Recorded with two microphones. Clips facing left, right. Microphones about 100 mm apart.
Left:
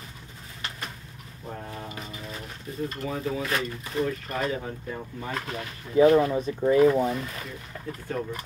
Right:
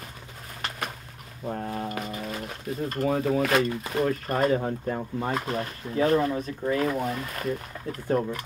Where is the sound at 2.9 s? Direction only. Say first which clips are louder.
Right 7 dB; 50° right (ahead or behind).